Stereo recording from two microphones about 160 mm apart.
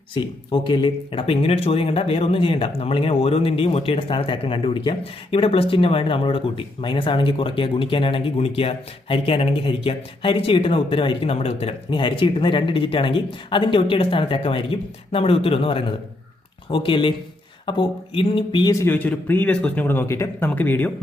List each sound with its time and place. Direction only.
0.1 s speech: 30° left (ahead or behind); by 20.9 s 10° left (ahead or behind)